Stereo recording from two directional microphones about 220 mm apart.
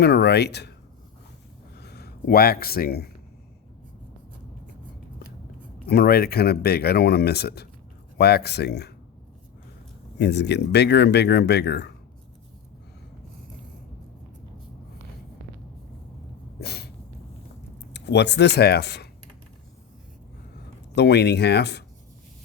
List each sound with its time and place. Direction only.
0.0 s speech: 50° left (ahead or behind)
1.7 s a sound: 50° left (ahead or behind)
5.8 s speech: 45° left (ahead or behind)
10.2 s speech: 50° left (ahead or behind)
16.6 s a sound: 45° left (ahead or behind)
17.9 s speech: 50° left (ahead or behind)
20.9 s speech: 50° left (ahead or behind)